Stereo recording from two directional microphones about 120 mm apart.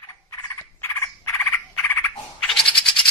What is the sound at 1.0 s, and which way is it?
Frog, 20° left (ahead or behind).